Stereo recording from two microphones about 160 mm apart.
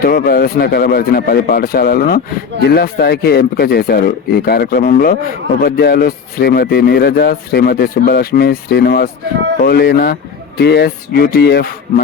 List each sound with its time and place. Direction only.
0.0 s speech: 70° left (ahead or behind)
2.6 s speech: 85° left